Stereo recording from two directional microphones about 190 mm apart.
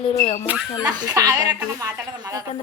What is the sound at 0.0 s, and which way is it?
Speech, 35° left (ahead or behind).